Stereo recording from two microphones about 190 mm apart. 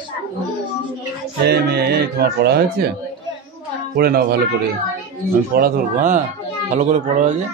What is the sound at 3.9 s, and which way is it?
Speech, 55° right (ahead or behind).